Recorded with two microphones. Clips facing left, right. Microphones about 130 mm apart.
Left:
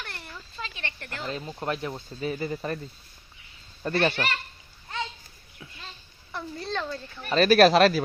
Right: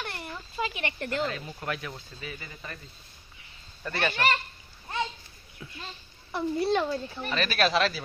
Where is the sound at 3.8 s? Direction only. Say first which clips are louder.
Left 7 dB; 35° left (ahead or behind).